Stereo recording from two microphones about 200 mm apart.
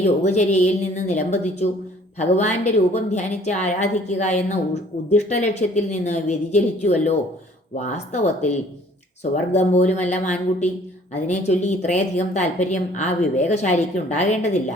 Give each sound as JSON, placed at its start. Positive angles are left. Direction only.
{"t": 0.0, "sound": "a woman's voice", "side_deg": 35}